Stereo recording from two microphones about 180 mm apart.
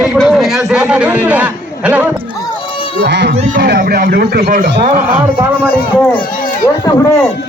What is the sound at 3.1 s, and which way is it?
Speech, 75° right (ahead or behind).